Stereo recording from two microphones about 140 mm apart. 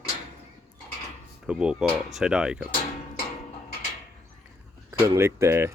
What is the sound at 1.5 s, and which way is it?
Speech, 5° right (ahead or behind).